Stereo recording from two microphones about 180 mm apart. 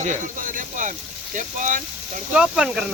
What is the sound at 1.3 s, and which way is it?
Speech, 45° right (ahead or behind).